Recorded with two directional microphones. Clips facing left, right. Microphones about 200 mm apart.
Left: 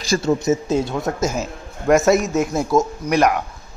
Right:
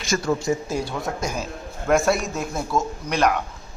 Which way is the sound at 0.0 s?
35° left (ahead or behind).